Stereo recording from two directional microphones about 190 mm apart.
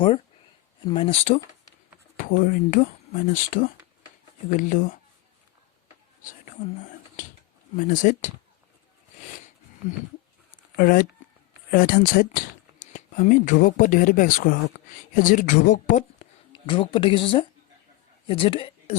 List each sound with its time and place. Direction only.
0.9 s speech: 30° left (ahead or behind)
2.1 s speech: 45° left (ahead or behind)
7.8 s speech: 45° left (ahead or behind)
10.8 s speech: 45° left (ahead or behind)
16.5 s speech: 25° left (ahead or behind)